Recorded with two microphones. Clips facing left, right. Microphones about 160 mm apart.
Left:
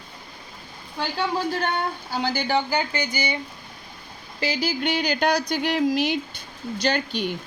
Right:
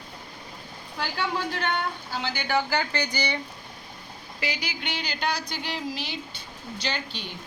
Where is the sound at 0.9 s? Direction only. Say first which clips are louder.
Left 4 dB; 30° left (ahead or behind).